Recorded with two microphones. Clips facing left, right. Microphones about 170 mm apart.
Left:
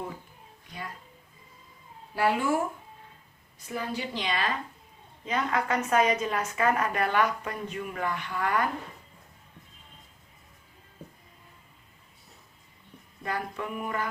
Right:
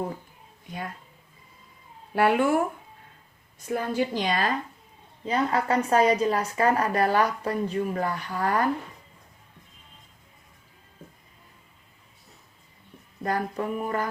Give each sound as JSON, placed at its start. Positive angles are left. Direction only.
{"t": 2.1, "sound": "speech", "side_deg": -60}
{"t": 3.7, "sound": "a woman's voice", "side_deg": -50}
{"t": 13.2, "sound": "a woman's voice", "side_deg": -40}